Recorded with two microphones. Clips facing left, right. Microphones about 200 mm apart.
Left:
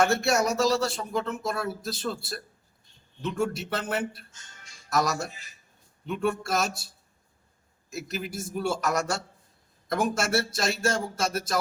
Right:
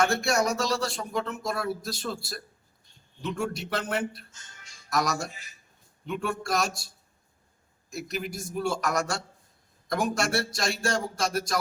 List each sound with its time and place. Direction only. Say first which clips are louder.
0.0 s speech: left 1 dB; 5° left (ahead or behind)
7.9 s speech: right 1 dB; centre (ahead or behind)